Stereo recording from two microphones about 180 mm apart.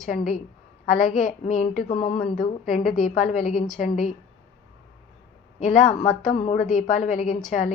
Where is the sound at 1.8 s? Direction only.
30° left (ahead or behind).